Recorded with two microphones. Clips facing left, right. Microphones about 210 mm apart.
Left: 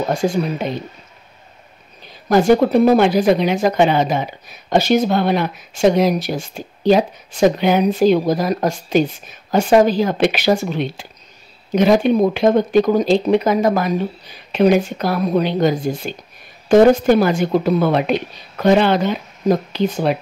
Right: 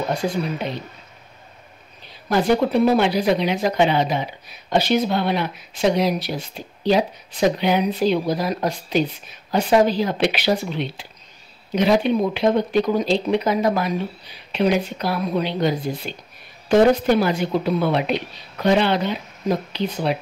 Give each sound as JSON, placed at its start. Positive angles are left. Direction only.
{"t": 0.1, "sound": "speech", "side_deg": 45}
{"t": 2.2, "sound": "speech", "side_deg": 45}